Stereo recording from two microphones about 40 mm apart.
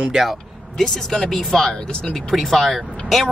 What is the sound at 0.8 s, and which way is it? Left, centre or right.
Speech, centre.